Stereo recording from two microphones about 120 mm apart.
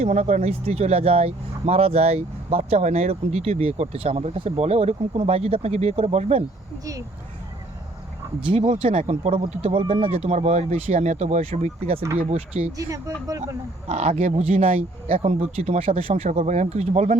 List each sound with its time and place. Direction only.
0.0 s speech: 75° right (ahead or behind); by 6.4 s 60° right (ahead or behind)
8.6 s speech: 70° right (ahead or behind)
12.7 s speech: 30° right (ahead or behind)
13.8 s speech: 65° right (ahead or behind)